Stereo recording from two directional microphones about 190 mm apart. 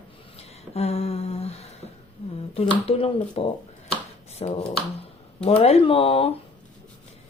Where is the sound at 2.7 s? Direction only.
30° left (ahead or behind).